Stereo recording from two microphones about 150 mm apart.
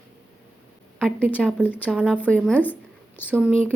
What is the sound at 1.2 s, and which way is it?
Speech, 10° right (ahead or behind).